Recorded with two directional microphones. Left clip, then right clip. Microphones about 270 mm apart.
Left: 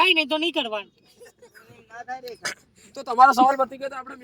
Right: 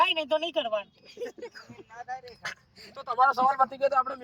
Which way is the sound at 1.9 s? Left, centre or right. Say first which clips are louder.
Left 5 dB; left.